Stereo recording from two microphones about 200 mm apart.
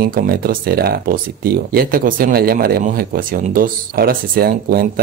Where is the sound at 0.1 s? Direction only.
45° right (ahead or behind).